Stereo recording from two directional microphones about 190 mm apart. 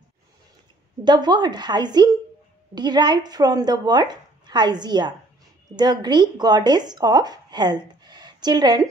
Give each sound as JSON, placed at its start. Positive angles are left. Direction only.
{"t": 1.0, "sound": "speech", "side_deg": -20}